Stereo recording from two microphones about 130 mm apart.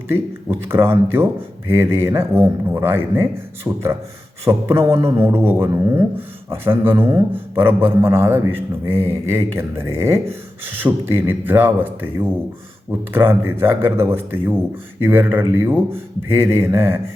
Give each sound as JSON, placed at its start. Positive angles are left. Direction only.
{"t": 0.6, "sound": "speech", "side_deg": -20}